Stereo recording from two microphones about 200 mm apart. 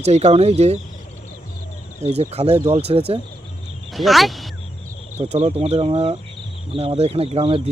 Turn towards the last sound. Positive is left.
turn(degrees=-30)  # may be behind; listen again after turning